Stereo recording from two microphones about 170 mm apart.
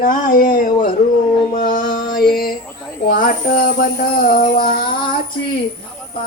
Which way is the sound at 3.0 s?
55° left (ahead or behind).